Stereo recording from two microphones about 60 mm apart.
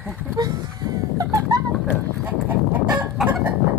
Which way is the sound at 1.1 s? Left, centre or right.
Right.